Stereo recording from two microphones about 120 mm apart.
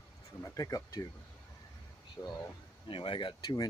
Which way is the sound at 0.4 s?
30° left (ahead or behind).